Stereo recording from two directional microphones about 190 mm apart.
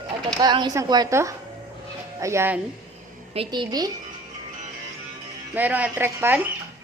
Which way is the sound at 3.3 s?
25° right (ahead or behind).